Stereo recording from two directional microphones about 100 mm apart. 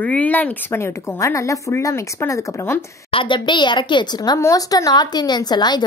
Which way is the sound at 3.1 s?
55° left (ahead or behind).